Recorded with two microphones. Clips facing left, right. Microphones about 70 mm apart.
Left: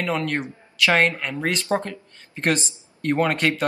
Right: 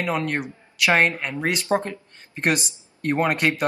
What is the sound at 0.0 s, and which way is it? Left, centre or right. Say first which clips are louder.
Speech: even; centre.